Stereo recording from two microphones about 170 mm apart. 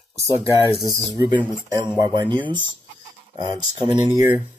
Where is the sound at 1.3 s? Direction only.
25° right (ahead or behind).